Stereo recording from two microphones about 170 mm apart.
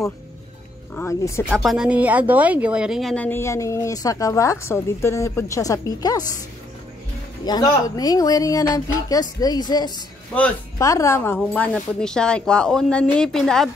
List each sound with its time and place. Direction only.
0.9 s speech: 15° left (ahead or behind)
1.5 s speech: centre (ahead or behind); by 6.2 s 20° left (ahead or behind)
7.4 s speech: 25° left (ahead or behind); by 13.7 s centre (ahead or behind)